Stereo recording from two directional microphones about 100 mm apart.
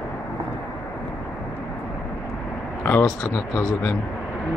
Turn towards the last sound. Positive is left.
turn(degrees=25)  # may be behind; listen again after turning